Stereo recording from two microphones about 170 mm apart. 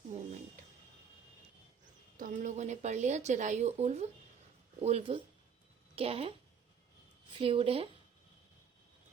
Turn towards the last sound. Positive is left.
turn(degrees=-35)  # may be behind; listen again after turning